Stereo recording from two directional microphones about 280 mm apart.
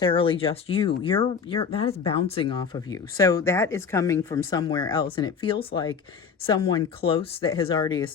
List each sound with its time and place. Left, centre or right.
0.0 s speech: centre